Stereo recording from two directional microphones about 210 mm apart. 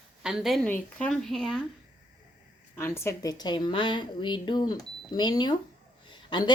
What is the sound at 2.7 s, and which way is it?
A woman's voice, 10° left (ahead or behind).